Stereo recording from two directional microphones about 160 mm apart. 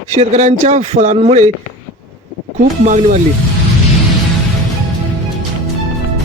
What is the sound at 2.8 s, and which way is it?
Speech, 50° right (ahead or behind).